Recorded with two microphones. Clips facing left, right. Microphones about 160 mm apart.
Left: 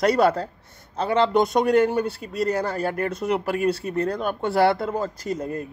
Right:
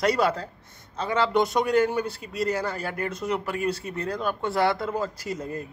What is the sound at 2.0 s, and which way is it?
Speech, 60° left (ahead or behind).